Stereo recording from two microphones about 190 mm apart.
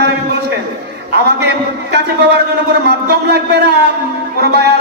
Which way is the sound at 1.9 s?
60° right (ahead or behind).